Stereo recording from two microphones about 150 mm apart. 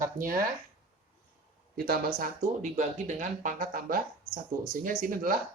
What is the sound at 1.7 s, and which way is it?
Speech, 90° right.